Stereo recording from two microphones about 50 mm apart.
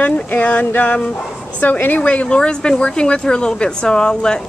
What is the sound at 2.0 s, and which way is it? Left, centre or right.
Speech, left.